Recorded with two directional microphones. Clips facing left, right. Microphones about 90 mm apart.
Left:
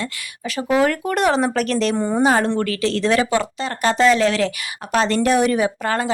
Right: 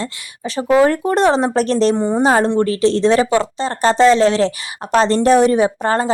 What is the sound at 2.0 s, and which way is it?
Speech, 20° right (ahead or behind).